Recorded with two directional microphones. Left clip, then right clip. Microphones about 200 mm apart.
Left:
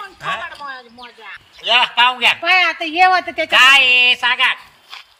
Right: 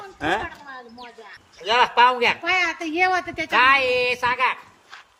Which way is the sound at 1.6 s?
20° right (ahead or behind).